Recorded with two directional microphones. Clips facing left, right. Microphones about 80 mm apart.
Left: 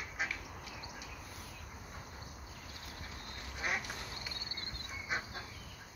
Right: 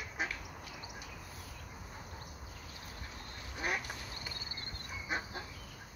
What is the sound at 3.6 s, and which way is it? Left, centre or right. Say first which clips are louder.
Quack: right 1 dB; centre.